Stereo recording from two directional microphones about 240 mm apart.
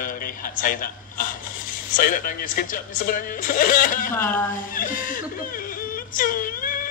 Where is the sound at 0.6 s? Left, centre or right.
Left.